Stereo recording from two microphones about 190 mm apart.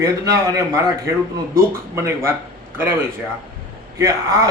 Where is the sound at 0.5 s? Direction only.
15° right (ahead or behind).